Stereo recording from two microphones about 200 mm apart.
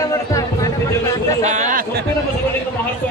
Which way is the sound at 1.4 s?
35° right (ahead or behind).